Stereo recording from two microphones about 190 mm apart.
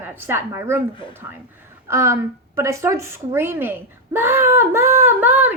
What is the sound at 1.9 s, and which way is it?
A woman's voice, 15° right (ahead or behind).